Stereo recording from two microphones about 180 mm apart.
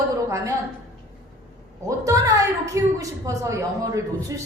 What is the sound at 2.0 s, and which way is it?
A woman's voice, 20° right (ahead or behind).